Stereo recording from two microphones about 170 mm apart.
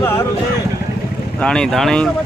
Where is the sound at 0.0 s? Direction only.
15° left (ahead or behind).